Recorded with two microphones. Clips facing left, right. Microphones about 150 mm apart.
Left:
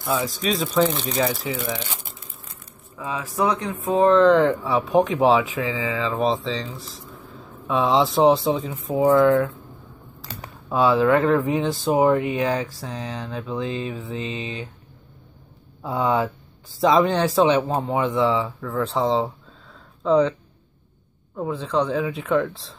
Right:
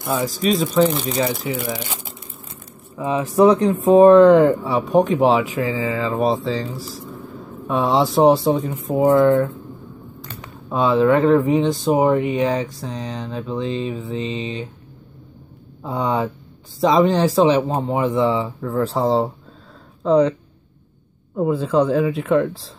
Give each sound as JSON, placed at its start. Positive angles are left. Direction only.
{"t": 0.0, "sound": "speech", "side_deg": -20}
{"t": 0.3, "sound": "speech", "side_deg": 0}
{"t": 3.0, "sound": "speech", "side_deg": -25}
{"t": 3.9, "sound": "speech", "side_deg": -15}
{"t": 4.6, "sound": "speech", "side_deg": 0}
{"t": 10.7, "sound": "speech", "side_deg": 0}
{"t": 15.8, "sound": "speech", "side_deg": 0}
{"t": 21.4, "sound": "speech", "side_deg": -5}